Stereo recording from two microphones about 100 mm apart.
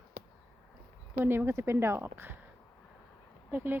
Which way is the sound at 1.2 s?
20° right (ahead or behind).